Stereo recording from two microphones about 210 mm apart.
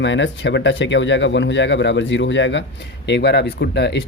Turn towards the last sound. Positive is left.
turn(degrees=55)  # may be behind; listen again after turning